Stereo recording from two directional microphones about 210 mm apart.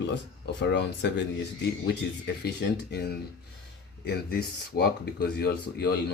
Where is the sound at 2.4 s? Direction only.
50° left (ahead or behind).